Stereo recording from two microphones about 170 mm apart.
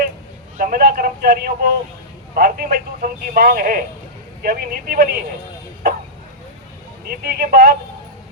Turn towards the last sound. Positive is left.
turn(degrees=-60)  # may be behind; listen again after turning